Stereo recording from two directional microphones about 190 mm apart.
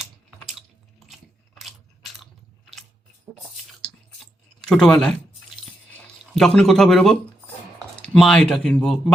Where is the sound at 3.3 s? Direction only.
Centre (ahead or behind).